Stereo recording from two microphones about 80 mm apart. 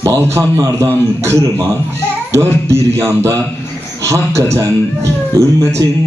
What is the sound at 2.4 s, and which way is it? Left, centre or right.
Speech, right.